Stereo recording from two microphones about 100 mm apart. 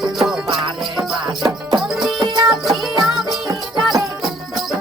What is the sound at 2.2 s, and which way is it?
Music, 45° right (ahead or behind).